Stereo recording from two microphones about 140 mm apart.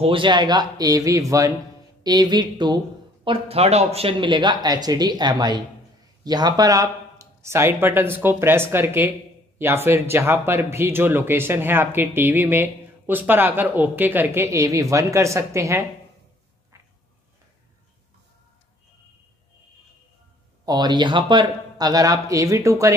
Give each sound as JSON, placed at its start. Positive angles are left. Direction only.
{"t": 0.0, "sound": "a man's voice", "side_deg": -35}
{"t": 3.3, "sound": "speech", "side_deg": -45}
{"t": 20.6, "sound": "a man's voice", "side_deg": -30}